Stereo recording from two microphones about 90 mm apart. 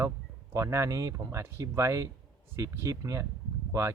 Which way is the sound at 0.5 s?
35° right (ahead or behind).